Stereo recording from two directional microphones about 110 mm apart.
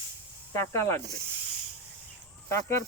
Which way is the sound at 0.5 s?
25° left (ahead or behind).